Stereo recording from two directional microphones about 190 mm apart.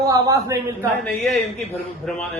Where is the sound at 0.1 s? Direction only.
15° right (ahead or behind).